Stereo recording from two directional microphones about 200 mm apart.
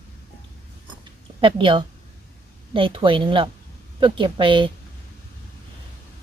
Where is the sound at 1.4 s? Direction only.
25° right (ahead or behind).